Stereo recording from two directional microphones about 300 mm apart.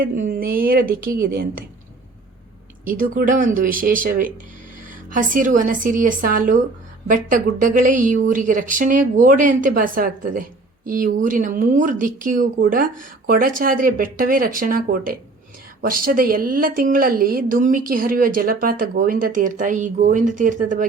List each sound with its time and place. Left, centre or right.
0.0 s speech: right
2.8 s speech: right